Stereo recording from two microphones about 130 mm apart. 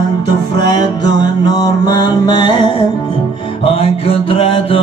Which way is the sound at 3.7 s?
50° left (ahead or behind).